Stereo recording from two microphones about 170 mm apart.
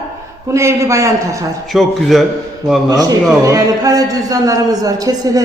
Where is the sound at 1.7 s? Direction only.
Centre (ahead or behind).